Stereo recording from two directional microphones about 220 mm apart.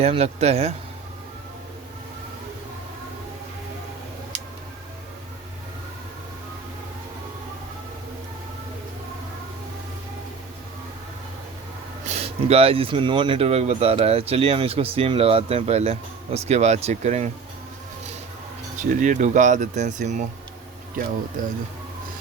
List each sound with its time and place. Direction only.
0.0 s speech: 30° right (ahead or behind)
12.0 s speech: 30° right (ahead or behind)
18.8 s speech: 35° right (ahead or behind)